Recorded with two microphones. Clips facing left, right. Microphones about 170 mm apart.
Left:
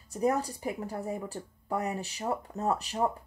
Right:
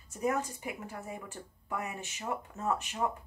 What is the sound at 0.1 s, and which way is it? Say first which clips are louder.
A woman's voice: left 4 dB; 35° left (ahead or behind).